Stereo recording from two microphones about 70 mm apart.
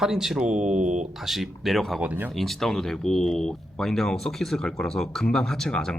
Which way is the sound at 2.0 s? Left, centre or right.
Right.